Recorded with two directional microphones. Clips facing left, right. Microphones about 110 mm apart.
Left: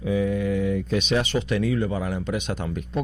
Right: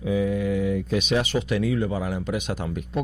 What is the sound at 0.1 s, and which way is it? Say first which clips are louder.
Speech: even; 10° right (ahead or behind).